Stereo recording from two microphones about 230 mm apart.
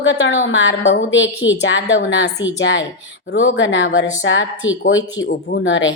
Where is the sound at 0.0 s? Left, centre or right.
Left.